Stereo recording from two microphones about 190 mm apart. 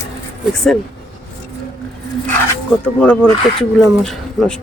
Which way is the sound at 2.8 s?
5° left (ahead or behind).